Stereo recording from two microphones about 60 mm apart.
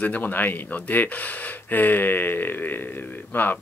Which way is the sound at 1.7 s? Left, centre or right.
Left.